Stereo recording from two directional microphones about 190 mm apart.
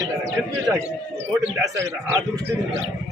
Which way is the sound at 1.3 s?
15° right (ahead or behind).